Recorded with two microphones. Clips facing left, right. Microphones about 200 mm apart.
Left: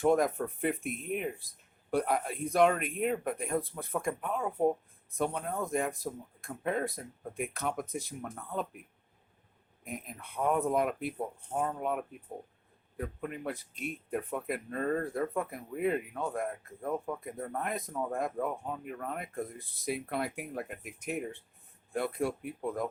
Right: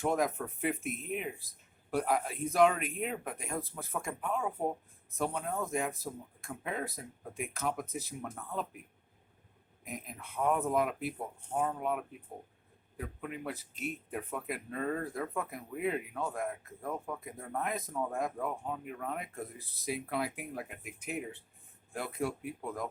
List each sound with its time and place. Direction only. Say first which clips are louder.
0.0 s speech: left 5 dB; centre (ahead or behind)
9.8 s speech: left 2 dB; centre (ahead or behind)
13.0 s speech: left 3 dB; 50° left (ahead or behind)
13.4 s speech: left 2 dB; 5° right (ahead or behind)